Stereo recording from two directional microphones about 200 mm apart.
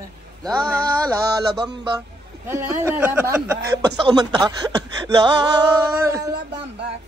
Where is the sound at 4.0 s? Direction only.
20° right (ahead or behind).